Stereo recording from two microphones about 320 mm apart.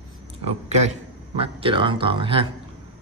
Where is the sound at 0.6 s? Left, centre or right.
Centre.